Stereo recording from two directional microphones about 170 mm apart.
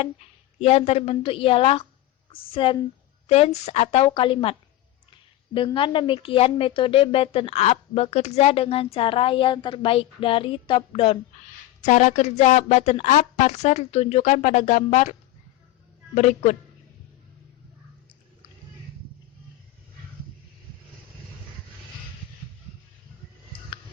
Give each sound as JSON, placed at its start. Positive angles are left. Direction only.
{"t": 0.6, "sound": "a woman's voice", "side_deg": 40}
{"t": 5.5, "sound": "a woman's voice", "side_deg": 30}
{"t": 11.8, "sound": "a woman's voice", "side_deg": 45}
{"t": 16.1, "sound": "a woman's voice", "side_deg": 45}
{"t": 23.5, "sound": "a sound", "side_deg": 30}